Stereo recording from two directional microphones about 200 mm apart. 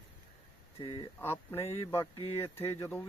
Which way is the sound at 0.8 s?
25° left (ahead or behind).